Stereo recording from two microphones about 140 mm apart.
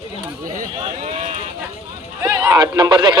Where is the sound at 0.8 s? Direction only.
50° right (ahead or behind).